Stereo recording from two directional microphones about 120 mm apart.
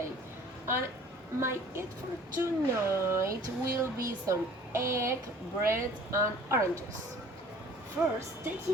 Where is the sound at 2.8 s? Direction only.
20° right (ahead or behind).